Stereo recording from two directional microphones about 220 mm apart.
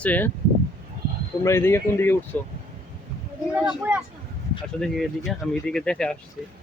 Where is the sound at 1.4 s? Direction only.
10° left (ahead or behind).